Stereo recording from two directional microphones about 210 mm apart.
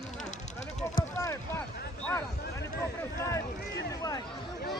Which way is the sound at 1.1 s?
10° left (ahead or behind).